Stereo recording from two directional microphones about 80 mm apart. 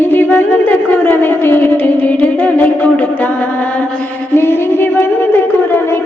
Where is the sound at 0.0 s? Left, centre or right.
Left.